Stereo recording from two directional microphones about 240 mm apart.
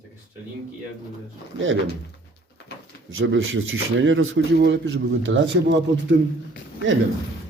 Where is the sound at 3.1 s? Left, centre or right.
Right.